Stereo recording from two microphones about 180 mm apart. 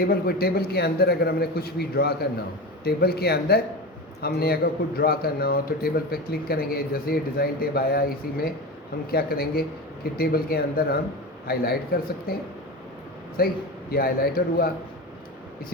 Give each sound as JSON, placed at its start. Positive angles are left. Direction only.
{"t": 0.0, "sound": "a man's voice", "side_deg": 55}